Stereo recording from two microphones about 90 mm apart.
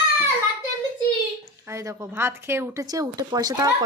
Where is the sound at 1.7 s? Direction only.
35° right (ahead or behind).